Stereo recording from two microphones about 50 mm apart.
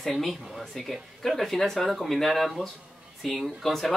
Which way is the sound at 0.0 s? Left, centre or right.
Centre.